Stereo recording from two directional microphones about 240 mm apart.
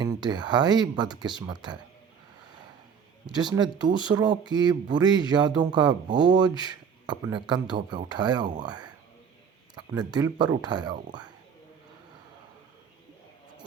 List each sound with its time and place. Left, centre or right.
0.0 s speech: centre
3.2 s speech: centre